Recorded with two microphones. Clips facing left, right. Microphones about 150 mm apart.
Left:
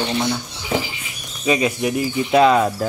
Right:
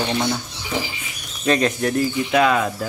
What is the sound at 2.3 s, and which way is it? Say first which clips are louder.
Speech: left 5 dB; 30° left (ahead or behind).